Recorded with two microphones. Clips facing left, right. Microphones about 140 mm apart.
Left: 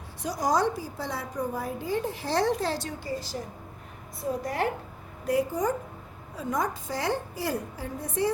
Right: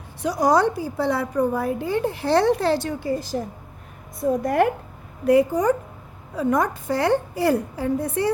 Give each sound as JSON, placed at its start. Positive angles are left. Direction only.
{"t": 0.2, "sound": "a woman's voice", "side_deg": -65}
{"t": 5.2, "sound": "a woman's voice", "side_deg": -65}